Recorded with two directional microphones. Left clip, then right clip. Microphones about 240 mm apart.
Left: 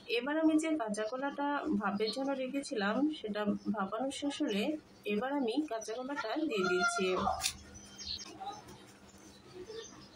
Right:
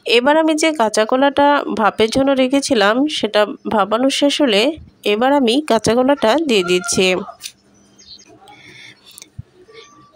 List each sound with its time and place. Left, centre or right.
0.1 s speech: right